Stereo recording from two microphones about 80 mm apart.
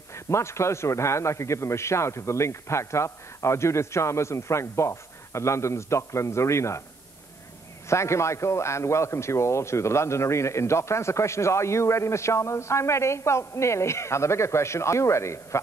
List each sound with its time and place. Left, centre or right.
0.1 s a man's voice: left
7.9 s a man's voice: left